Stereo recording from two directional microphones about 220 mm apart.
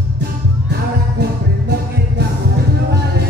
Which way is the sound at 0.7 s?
50° right (ahead or behind).